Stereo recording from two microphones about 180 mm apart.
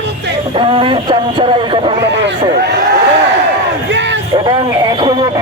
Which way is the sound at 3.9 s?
80° right.